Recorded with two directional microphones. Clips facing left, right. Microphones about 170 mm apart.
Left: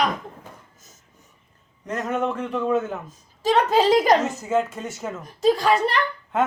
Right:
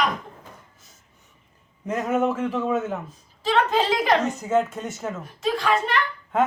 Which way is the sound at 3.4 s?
40° left (ahead or behind).